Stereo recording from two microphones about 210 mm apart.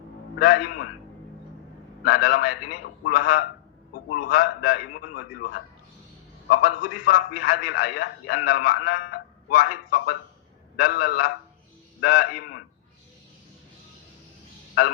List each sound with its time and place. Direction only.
0.3 s a man's voice: 45° left (ahead or behind)
2.0 s a man's voice: 45° left (ahead or behind)